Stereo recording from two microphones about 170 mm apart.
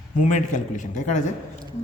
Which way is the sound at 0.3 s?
45° left (ahead or behind).